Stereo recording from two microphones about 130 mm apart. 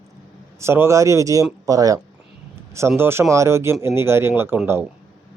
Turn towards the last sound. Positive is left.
turn(degrees=-15)  # may be behind; listen again after turning